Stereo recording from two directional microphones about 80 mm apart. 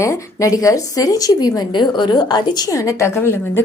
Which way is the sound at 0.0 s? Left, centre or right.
Left.